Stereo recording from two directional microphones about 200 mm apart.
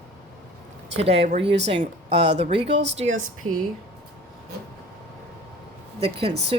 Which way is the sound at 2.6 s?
60° right (ahead or behind).